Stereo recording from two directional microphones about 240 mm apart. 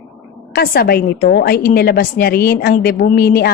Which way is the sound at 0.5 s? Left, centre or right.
Left.